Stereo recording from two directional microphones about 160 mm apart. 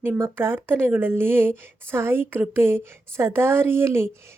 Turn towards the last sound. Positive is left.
turn(degrees=-15)  # may be behind; listen again after turning